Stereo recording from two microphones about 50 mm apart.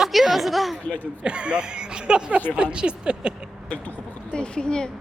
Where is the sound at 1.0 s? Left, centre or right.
Right.